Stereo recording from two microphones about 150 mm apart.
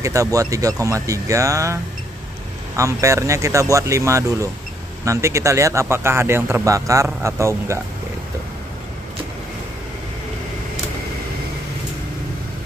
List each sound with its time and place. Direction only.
0.0 s speech: 20° right (ahead or behind)